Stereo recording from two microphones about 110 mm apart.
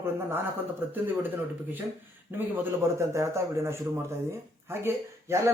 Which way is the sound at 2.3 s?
20° right (ahead or behind).